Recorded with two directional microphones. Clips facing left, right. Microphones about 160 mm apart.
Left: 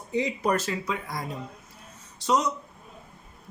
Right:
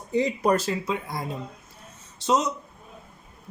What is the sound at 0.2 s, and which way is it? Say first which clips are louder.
Speech: right 3 dB; 35° right (ahead or behind).